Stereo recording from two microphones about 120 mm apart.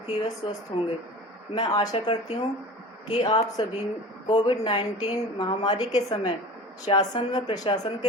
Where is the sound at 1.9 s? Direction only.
60° left (ahead or behind).